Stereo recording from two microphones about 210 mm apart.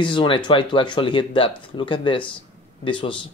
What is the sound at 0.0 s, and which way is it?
Speech, 25° left (ahead or behind).